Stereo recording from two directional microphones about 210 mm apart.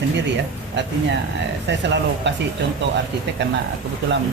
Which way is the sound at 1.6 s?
55° right (ahead or behind).